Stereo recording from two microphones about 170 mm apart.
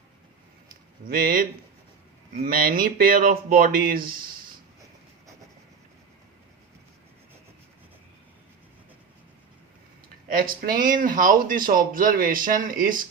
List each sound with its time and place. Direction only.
1.0 s speech: 60° right (ahead or behind)
10.3 s speech: 60° right (ahead or behind)